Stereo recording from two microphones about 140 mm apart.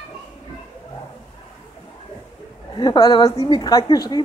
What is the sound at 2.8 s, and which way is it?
A woman's voice, 30° left (ahead or behind).